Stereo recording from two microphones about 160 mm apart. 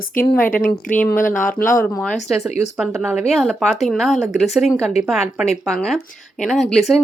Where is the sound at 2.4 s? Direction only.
15° right (ahead or behind).